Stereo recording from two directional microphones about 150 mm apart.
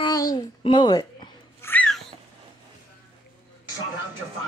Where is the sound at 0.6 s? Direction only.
30° left (ahead or behind).